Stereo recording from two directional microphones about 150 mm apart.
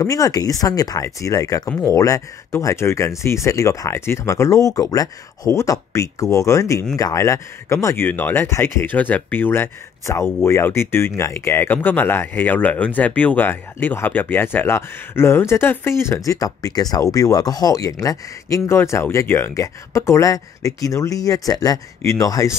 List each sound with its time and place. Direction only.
0.0 s speech: 20° left (ahead or behind)